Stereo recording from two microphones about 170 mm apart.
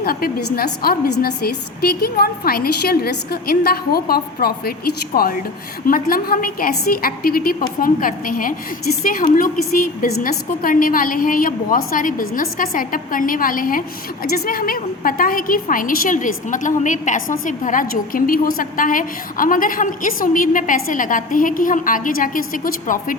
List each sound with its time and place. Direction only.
0.0 s a woman's voice: 60° left (ahead or behind)